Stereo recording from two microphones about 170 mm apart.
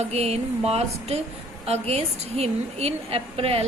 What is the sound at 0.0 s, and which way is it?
A woman's voice, 40° right (ahead or behind).